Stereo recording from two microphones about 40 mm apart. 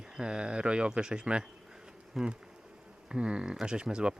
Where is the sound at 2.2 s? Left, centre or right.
Centre.